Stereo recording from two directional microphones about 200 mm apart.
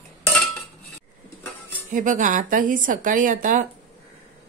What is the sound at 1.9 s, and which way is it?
Speech, 40° right (ahead or behind).